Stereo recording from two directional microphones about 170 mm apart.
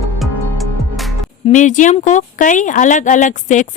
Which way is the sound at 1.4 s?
45° left (ahead or behind).